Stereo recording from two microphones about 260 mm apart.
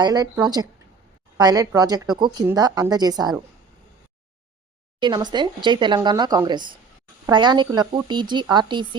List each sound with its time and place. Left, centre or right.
0.0 s speech: centre
4.9 s speech: centre